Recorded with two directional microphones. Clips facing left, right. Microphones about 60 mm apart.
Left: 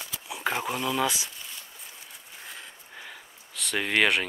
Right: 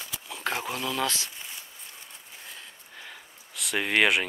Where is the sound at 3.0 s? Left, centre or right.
Centre.